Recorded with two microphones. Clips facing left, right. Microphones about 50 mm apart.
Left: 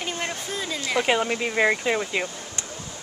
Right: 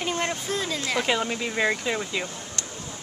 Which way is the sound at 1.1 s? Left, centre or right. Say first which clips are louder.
Left 3 dB; centre.